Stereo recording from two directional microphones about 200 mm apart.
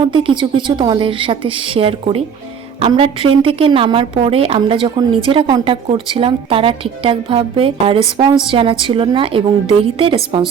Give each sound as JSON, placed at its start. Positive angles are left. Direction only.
{"t": 0.0, "sound": "a woman's voice", "side_deg": -25}